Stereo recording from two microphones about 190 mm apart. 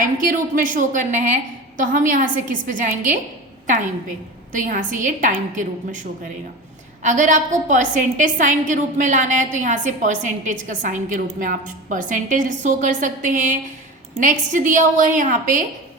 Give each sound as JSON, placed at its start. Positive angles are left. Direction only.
{"t": 0.0, "sound": "a woman's voice", "side_deg": -45}
{"t": 4.5, "sound": "a woman's voice", "side_deg": -45}